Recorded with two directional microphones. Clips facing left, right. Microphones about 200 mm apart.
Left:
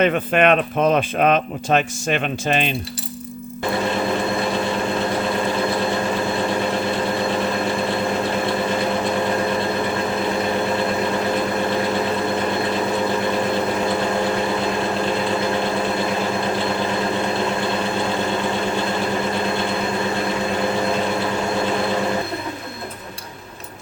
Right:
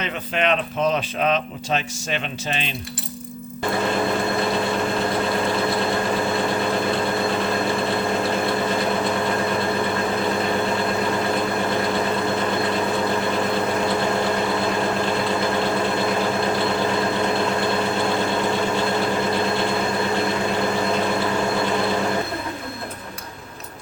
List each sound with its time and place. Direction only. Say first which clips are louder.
0.0 s speech: left 8 dB; 55° left (ahead or behind)